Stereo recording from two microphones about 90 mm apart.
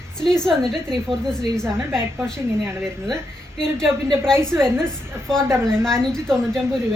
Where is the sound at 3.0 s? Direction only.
5° left (ahead or behind).